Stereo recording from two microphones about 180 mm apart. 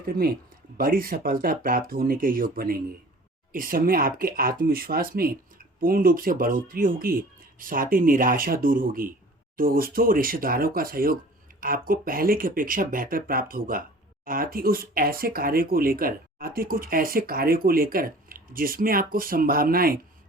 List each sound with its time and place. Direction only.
0.0 s speech: 55° right (ahead or behind)